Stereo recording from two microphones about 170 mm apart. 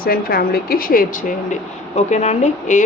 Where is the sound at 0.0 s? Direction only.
60° left (ahead or behind).